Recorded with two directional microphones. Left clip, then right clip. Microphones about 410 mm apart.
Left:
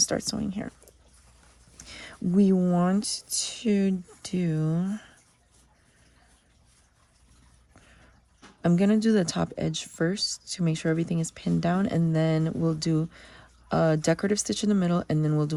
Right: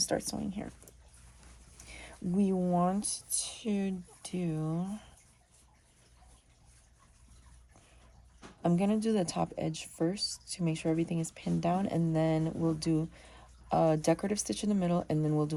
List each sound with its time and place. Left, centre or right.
0.0 s speech: centre
1.8 s speech: centre
8.6 s speech: left